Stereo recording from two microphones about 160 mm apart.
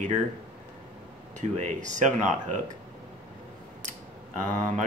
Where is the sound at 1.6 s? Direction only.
50° right (ahead or behind).